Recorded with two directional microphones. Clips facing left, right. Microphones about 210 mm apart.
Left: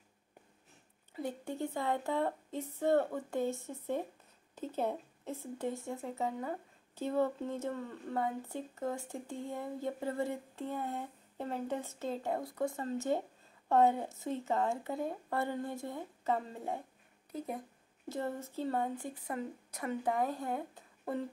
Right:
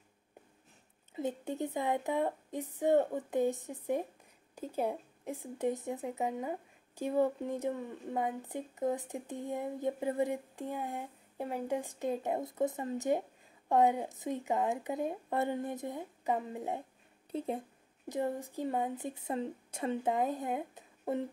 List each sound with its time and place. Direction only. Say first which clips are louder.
1.1 s speech: right 3 dB; 20° right (ahead or behind)
17.3 s a woman's voice: right 4 dB; 30° right (ahead or behind)
18.0 s a woman's voice: right 3 dB; 15° right (ahead or behind)